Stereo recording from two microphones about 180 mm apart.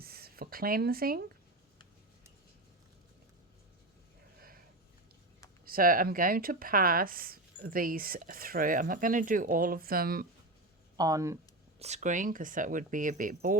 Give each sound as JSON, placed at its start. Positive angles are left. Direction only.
{"t": 0.0, "sound": "speech", "side_deg": -60}
{"t": 5.6, "sound": "speech", "side_deg": -55}
{"t": 10.9, "sound": "speech", "side_deg": -20}
{"t": 11.8, "sound": "speech", "side_deg": -40}